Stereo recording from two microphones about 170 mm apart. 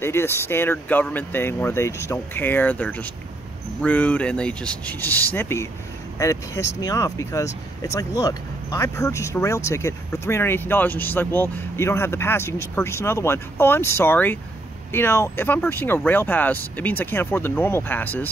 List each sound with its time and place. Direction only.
0.0 s speech: 15° left (ahead or behind)